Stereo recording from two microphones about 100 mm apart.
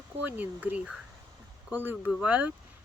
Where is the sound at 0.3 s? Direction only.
15° right (ahead or behind).